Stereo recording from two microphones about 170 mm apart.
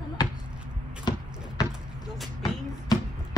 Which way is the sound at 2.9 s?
20° left (ahead or behind).